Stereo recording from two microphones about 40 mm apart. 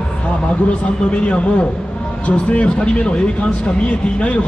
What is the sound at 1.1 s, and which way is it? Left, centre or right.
A man's voice, left.